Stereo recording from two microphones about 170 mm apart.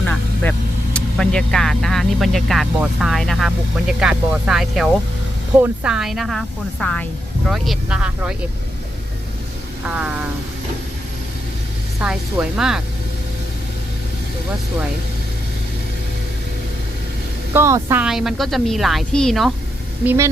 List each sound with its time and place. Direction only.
0.0 s vehicle: 10° left (ahead or behind)
0.9 s speech: 5° left (ahead or behind)
9.8 s a woman's voice: 5° right (ahead or behind)
11.9 s speech: 5° right (ahead or behind)
17.5 s a woman's voice: 15° right (ahead or behind)
18.0 s speech: 5° right (ahead or behind)